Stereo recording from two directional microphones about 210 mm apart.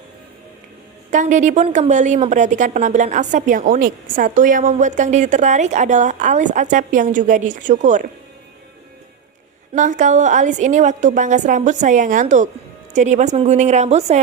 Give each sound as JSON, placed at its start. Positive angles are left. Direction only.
{"t": 1.1, "sound": "a woman's voice", "side_deg": -35}
{"t": 9.7, "sound": "a woman's voice", "side_deg": -35}